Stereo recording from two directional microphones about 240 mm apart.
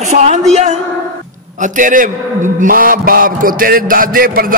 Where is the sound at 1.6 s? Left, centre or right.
Right.